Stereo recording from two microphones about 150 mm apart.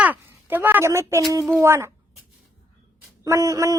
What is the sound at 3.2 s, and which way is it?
Speech, 20° right (ahead or behind).